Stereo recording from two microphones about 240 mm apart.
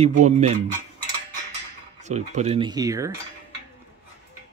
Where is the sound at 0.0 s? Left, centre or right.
Right.